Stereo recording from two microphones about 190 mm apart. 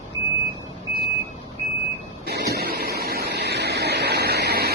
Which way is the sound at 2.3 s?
55° right (ahead or behind).